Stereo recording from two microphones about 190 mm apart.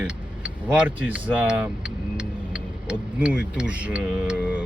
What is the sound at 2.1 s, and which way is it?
Vehicle, 5° right (ahead or behind).